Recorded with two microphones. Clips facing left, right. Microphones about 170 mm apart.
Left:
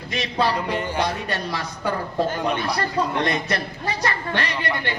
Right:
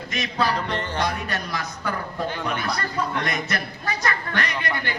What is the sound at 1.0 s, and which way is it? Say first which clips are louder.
A woman's voice: left 1 dB; 30° left (ahead or behind).